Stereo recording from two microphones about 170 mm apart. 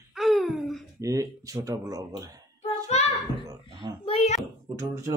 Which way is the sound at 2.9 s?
40° left (ahead or behind).